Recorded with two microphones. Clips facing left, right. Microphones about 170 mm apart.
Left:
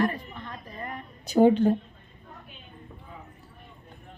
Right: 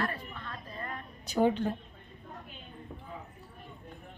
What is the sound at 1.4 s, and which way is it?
Speech, 30° left (ahead or behind).